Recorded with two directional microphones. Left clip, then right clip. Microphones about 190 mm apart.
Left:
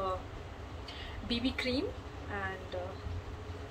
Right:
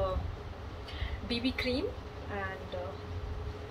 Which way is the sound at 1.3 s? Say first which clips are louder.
Right 1 dB; 5° left (ahead or behind).